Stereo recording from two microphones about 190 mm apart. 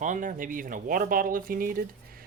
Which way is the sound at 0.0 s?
40° right (ahead or behind).